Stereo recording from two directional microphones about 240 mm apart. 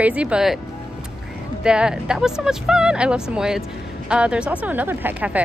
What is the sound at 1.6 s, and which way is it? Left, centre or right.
Speech, centre.